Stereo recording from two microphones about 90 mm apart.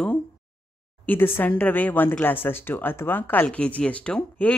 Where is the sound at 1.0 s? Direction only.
20° left (ahead or behind).